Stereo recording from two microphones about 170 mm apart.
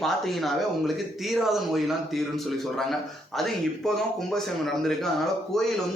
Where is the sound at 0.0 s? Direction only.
Centre (ahead or behind).